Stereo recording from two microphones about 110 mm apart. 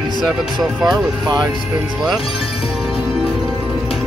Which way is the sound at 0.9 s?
40° right (ahead or behind).